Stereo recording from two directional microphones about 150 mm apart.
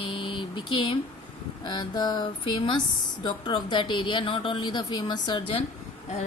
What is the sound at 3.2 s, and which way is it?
Speech, 30° left (ahead or behind).